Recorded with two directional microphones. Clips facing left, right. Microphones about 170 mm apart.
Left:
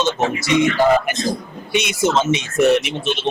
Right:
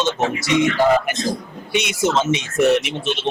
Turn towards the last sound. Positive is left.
turn(degrees=10)  # may be behind; listen again after turning